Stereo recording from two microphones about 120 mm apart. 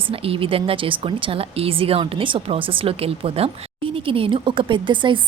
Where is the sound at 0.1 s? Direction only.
50° right (ahead or behind).